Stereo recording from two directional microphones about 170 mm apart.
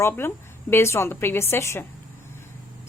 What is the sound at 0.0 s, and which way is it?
A woman's voice, 15° left (ahead or behind).